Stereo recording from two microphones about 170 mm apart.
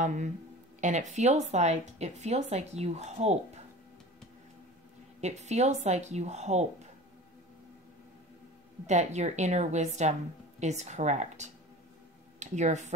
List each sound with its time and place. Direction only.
0.0 s a woman's voice: 45° right (ahead or behind)
5.2 s speech: 40° right (ahead or behind)
8.8 s a woman's voice: 40° right (ahead or behind)